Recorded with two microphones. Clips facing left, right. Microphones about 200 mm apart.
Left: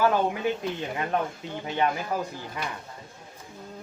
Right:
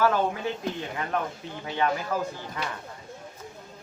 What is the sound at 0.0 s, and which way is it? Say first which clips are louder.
Speech: left 1 dB; 15° left (ahead or behind).